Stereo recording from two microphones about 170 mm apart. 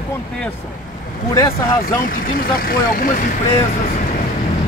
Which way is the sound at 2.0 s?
55° left (ahead or behind).